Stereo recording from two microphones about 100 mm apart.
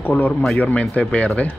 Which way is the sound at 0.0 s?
15° left (ahead or behind).